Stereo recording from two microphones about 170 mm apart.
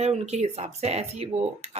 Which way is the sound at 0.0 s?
40° right (ahead or behind).